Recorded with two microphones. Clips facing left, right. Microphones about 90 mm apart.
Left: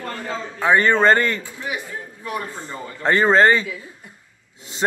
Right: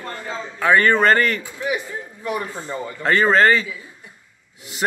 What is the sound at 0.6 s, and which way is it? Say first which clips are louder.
Speech: even; 20° left (ahead or behind).